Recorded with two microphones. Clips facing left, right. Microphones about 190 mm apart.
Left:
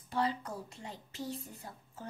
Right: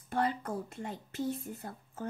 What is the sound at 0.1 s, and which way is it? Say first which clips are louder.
A woman's voice: right 2 dB; 50° right (ahead or behind).